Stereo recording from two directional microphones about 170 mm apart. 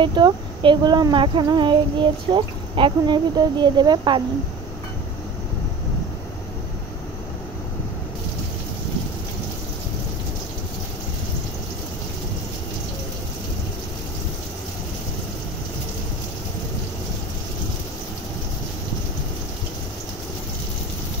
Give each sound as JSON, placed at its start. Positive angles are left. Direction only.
{"t": 0.0, "sound": "speech", "side_deg": -25}